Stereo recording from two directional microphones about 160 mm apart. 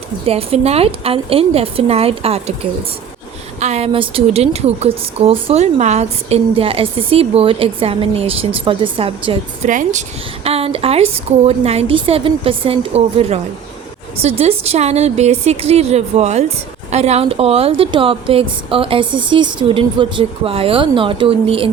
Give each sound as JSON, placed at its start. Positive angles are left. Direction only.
{"t": 0.3, "sound": "a woman's voice", "side_deg": -40}
{"t": 3.6, "sound": "a woman's voice", "side_deg": -40}
{"t": 9.6, "sound": "speech", "side_deg": -55}
{"t": 10.4, "sound": "a woman's voice", "side_deg": -40}